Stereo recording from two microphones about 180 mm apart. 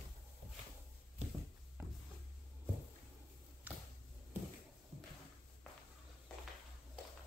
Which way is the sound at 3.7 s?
10° right (ahead or behind).